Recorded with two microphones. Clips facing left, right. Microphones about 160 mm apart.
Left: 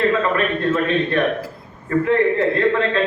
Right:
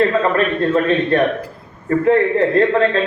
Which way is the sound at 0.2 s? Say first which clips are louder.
Right 3 dB; 40° right (ahead or behind).